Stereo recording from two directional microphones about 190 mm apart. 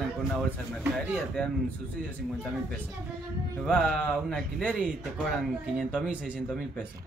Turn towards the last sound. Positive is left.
turn(degrees=0)  # may be behind; listen again after turning